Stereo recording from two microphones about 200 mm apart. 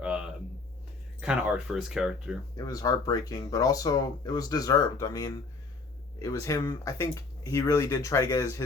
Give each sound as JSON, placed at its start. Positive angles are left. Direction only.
{"t": 0.0, "sound": "a sound", "side_deg": -5}
{"t": 1.2, "sound": "speech", "side_deg": -5}
{"t": 2.6, "sound": "speech", "side_deg": 20}